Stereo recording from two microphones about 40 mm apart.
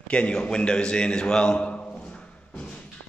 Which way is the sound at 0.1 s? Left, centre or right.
Left.